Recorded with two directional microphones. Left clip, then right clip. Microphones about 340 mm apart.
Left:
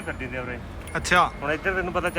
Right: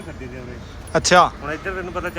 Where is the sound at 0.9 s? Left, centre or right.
Centre.